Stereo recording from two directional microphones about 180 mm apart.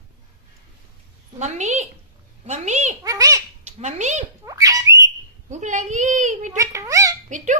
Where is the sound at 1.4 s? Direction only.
40° right (ahead or behind).